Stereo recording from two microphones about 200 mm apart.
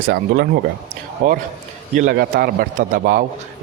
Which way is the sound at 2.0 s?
45° right (ahead or behind).